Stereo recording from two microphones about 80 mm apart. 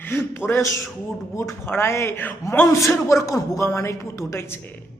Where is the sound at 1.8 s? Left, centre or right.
Left.